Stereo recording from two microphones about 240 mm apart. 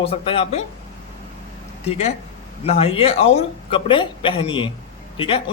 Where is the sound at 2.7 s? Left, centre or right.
Left.